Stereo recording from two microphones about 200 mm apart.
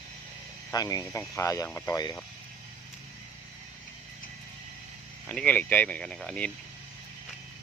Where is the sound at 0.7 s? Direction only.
15° left (ahead or behind).